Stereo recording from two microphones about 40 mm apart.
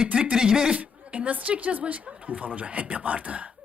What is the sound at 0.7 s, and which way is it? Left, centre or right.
Speech, right.